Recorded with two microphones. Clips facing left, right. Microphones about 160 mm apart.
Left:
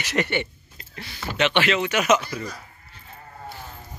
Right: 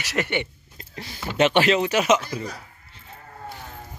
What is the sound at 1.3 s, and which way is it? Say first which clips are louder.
Speech: right 3 dB; 40° right (ahead or behind).